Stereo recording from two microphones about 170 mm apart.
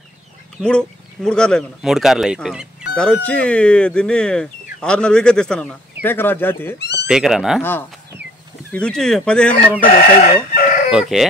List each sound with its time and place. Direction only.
0.6 s speech: 5° left (ahead or behind)
6.8 s cat: 85° left
7.1 s speech: 5° right (ahead or behind)
8.7 s speech: 5° left (ahead or behind)
9.8 s chicken: 60° left (ahead or behind)
10.5 s chicken: 50° left (ahead or behind)
10.9 s speech: centre (ahead or behind)